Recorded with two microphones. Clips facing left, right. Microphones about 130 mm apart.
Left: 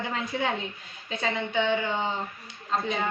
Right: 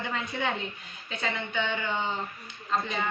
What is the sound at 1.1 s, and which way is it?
Speech, 35° left (ahead or behind).